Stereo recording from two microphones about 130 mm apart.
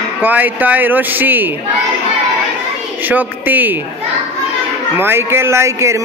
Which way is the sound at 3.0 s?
15° right (ahead or behind).